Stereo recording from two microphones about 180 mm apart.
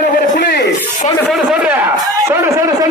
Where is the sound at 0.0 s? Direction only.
65° left (ahead or behind).